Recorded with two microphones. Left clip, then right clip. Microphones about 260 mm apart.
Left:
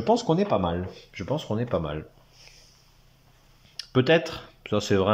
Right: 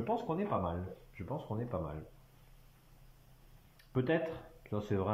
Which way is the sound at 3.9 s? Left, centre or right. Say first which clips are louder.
Left 12 dB; left.